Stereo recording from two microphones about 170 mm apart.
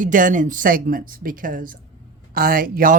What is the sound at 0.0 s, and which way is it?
Speech, 50° right (ahead or behind).